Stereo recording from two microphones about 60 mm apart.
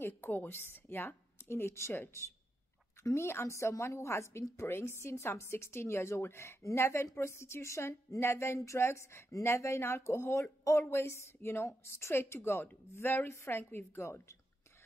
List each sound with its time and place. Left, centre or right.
0.0 s a woman's voice: left
3.0 s a woman's voice: left